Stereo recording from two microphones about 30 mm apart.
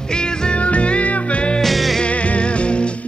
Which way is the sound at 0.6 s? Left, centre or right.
Left.